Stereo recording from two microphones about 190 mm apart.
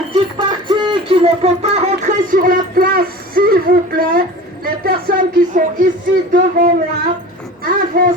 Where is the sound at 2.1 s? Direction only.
45° right (ahead or behind).